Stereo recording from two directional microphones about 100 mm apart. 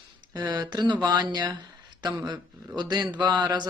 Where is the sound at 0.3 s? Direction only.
40° right (ahead or behind).